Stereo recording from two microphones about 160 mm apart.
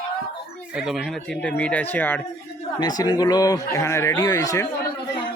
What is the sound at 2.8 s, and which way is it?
Speech, 25° left (ahead or behind).